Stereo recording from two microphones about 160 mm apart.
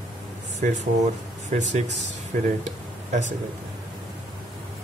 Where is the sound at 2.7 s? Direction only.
50° right (ahead or behind).